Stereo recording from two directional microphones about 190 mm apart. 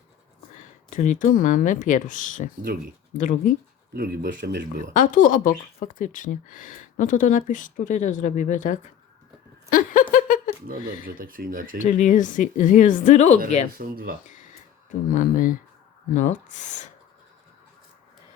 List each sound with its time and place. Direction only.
0.9 s speech: 40° left (ahead or behind)
3.9 s speech: 55° right (ahead or behind)
4.9 s speech: 45° left (ahead or behind)
9.6 s a sound: 45° left (ahead or behind)
11.1 s speech: 50° right (ahead or behind)
11.8 s speech: 40° left (ahead or behind)
13.7 s speech: 50° right (ahead or behind)
14.8 s speech: 45° left (ahead or behind)